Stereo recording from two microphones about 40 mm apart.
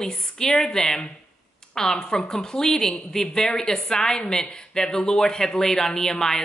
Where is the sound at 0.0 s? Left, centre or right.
Centre.